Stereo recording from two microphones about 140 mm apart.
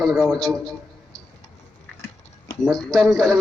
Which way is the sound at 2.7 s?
5° left (ahead or behind).